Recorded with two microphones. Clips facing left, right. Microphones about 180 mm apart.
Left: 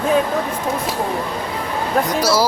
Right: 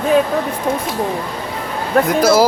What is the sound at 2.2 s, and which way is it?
Speech, 50° right (ahead or behind).